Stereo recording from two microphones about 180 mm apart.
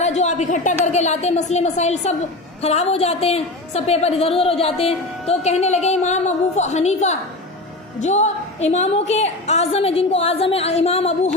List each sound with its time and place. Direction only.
0.0 s a woman's voice: 40° left (ahead or behind)